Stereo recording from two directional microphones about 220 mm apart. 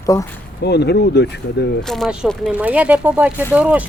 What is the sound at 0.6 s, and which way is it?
Speech, 50° left (ahead or behind).